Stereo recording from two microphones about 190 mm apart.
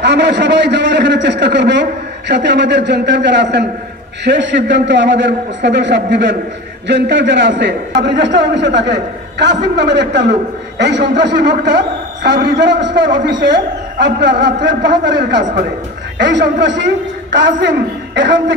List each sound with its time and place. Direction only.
0.0 s a man's voice: 65° right (ahead or behind)